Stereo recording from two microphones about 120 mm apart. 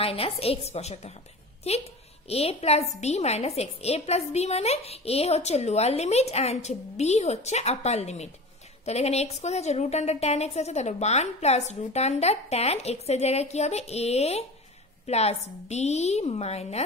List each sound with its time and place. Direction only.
0.0 s a woman's voice: 55° left (ahead or behind)